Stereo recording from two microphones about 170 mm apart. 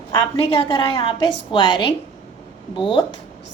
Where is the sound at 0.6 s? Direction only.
25° left (ahead or behind).